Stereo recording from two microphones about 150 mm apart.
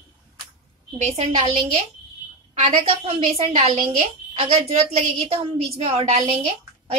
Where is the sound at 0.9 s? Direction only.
50° right (ahead or behind).